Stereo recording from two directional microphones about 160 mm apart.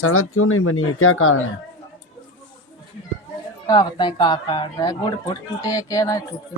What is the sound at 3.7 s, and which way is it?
Speech, 25° left (ahead or behind).